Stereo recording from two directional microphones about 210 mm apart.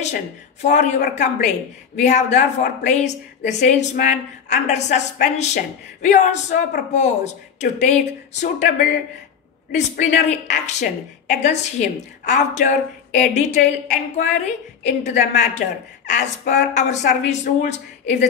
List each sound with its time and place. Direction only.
0.0 s a woman's voice: 35° left (ahead or behind)